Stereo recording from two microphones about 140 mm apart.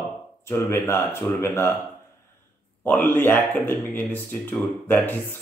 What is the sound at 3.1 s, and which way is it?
Speech, 15° left (ahead or behind).